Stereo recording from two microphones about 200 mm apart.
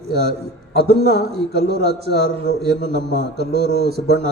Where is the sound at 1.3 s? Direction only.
55° right (ahead or behind).